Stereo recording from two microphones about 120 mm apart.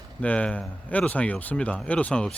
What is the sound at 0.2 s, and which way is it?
Speech, 10° left (ahead or behind).